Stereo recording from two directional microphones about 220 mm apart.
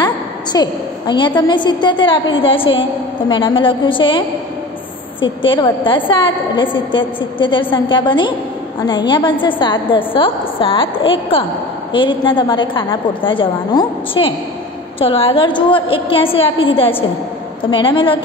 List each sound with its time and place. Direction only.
0.0 s a woman's voice: 20° left (ahead or behind)
5.4 s a woman's voice: 25° left (ahead or behind)